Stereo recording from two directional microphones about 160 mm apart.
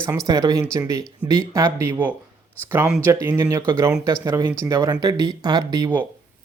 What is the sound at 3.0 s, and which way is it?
Speech, 15° right (ahead or behind).